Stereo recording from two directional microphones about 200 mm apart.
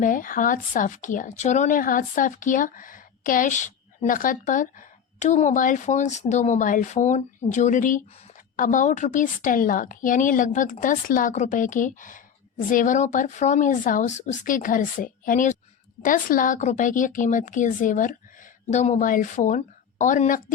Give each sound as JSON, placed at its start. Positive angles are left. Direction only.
{"t": 0.0, "sound": "a woman's voice", "side_deg": 45}